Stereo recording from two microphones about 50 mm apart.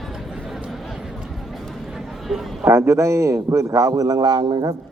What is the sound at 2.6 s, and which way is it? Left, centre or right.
A man's voice, right.